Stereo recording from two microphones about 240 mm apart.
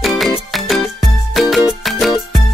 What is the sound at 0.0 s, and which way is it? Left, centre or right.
Music, centre.